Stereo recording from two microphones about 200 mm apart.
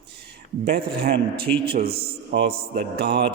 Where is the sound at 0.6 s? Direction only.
50° right (ahead or behind).